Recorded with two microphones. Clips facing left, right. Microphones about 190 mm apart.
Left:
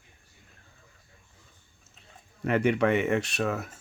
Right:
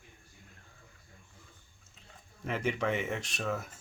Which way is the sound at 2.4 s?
65° left (ahead or behind).